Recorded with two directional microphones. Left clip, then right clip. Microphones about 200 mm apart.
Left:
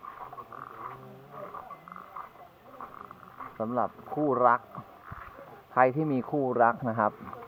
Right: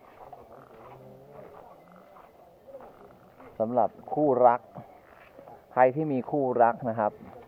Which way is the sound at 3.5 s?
15° right (ahead or behind).